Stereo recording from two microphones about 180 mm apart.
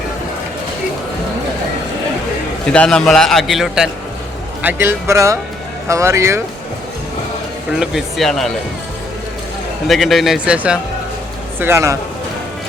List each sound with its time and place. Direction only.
2.6 s speech: 5° left (ahead or behind)
4.6 s speech: 10° right (ahead or behind)
7.8 s speech: centre (ahead or behind)
9.8 s speech: centre (ahead or behind)